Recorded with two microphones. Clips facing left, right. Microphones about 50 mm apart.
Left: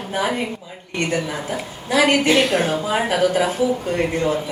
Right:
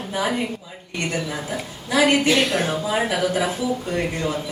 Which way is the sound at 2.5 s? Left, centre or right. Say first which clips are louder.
Left 3 dB; left.